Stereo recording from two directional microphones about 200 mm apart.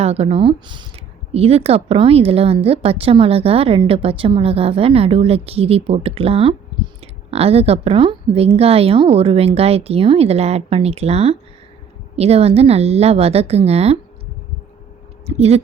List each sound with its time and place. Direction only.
0.0 s a woman's voice: 30° right (ahead or behind)
15.4 s a woman's voice: 30° right (ahead or behind)